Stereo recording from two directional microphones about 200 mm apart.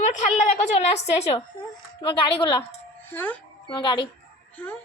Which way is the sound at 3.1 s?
10° left (ahead or behind).